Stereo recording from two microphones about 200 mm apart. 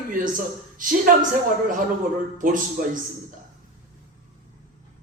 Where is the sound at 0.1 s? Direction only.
40° right (ahead or behind).